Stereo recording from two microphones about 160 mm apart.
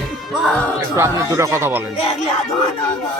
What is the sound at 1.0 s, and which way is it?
Speech, 20° right (ahead or behind).